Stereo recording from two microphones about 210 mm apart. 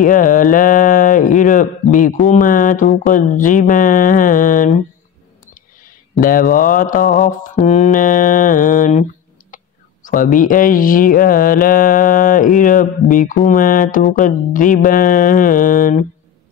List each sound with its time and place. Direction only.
0.0 s speech: 40° left (ahead or behind)
6.1 s speech: 40° left (ahead or behind)
10.0 s speech: 40° left (ahead or behind)